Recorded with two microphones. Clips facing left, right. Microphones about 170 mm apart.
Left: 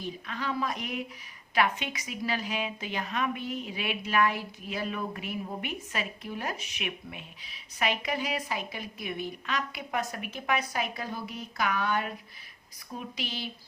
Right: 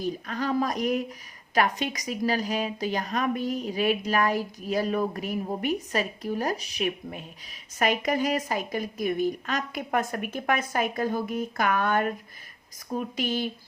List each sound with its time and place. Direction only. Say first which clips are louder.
0.0 s a woman's voice: right 6 dB; 40° right (ahead or behind)